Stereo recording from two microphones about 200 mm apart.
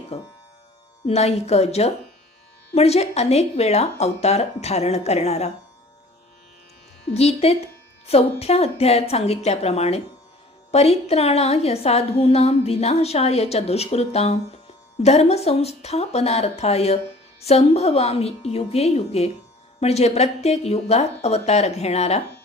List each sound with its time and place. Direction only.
0.1 s a woman's voice: 30° left (ahead or behind)
7.1 s a woman's voice: 30° left (ahead or behind)